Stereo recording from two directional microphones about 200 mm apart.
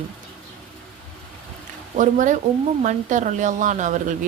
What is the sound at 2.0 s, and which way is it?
A woman's voice, 40° right (ahead or behind).